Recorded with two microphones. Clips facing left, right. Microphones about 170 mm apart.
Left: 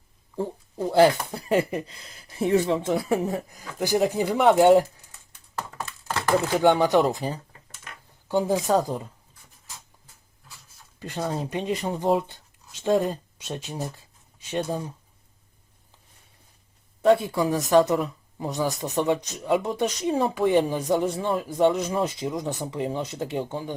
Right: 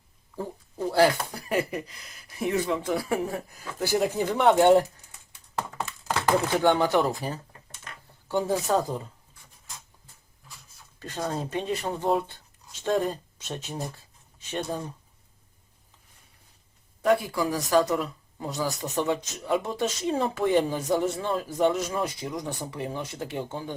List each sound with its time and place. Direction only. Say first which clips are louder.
0.8 s speech: left 3 dB; 20° left (ahead or behind)
6.6 s speech: left 6 dB; 15° left (ahead or behind)
11.0 s speech: left 2 dB; 10° left (ahead or behind)
13.9 s writing: left 1 dB; 15° left (ahead or behind)
17.0 s speech: left 4 dB; 25° left (ahead or behind)